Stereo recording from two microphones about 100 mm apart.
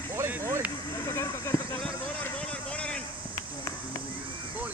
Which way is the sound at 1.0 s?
30° left (ahead or behind).